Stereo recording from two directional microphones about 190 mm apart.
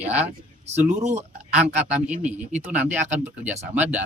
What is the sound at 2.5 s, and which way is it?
Speech, 40° right (ahead or behind).